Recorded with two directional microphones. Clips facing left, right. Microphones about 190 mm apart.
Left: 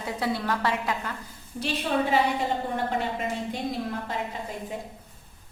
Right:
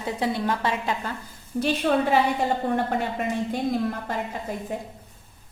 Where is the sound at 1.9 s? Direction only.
60° right (ahead or behind).